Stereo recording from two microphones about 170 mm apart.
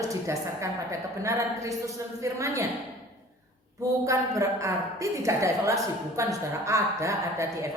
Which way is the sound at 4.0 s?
20° right (ahead or behind).